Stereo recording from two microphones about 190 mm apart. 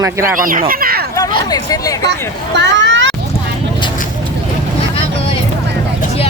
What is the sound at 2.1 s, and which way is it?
Speech, 65° right (ahead or behind).